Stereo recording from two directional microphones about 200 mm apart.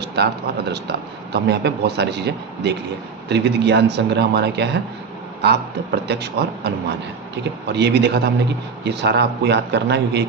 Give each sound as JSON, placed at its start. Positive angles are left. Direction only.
{"t": 0.2, "sound": "a man's voice", "side_deg": -55}